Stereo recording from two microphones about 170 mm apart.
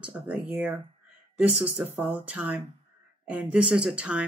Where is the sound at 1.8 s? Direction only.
10° right (ahead or behind).